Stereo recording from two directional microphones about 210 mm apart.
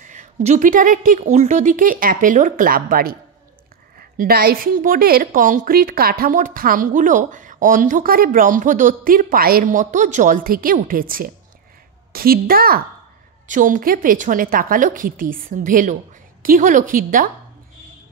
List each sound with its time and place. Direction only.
0.0 s a woman's voice: 35° right (ahead or behind)
4.2 s a woman's voice: 45° right (ahead or behind)